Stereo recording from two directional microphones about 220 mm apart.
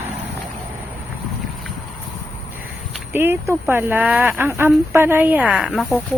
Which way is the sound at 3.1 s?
10° right (ahead or behind).